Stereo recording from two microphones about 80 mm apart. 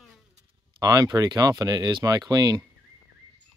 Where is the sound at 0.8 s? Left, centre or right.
Right.